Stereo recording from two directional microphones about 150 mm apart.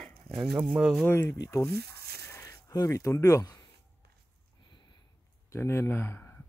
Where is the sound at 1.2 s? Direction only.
20° left (ahead or behind).